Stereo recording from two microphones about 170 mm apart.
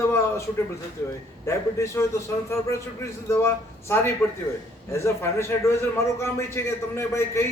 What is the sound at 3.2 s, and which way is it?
A man's voice, 15° left (ahead or behind).